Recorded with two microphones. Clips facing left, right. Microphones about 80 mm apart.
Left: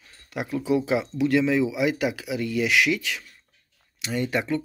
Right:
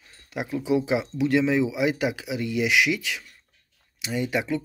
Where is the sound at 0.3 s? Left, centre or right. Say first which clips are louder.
Even; centre.